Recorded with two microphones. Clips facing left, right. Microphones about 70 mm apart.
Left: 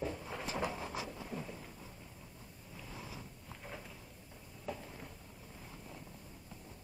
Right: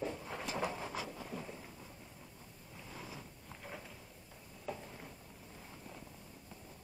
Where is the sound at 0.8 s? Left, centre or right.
Right.